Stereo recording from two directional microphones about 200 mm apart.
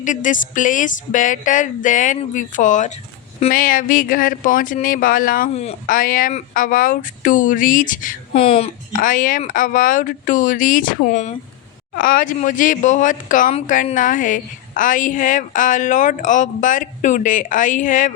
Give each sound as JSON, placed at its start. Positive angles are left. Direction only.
{"t": 0.0, "sound": "a woman's voice", "side_deg": 40}
{"t": 8.4, "sound": "a woman's voice", "side_deg": 30}
{"t": 8.9, "sound": "a woman's voice", "side_deg": 45}